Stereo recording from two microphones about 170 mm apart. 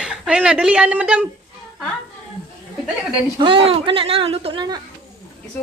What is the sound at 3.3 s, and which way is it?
Speech, 30° right (ahead or behind).